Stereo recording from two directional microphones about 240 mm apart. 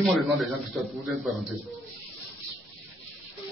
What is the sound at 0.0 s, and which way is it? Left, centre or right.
A man's voice, centre.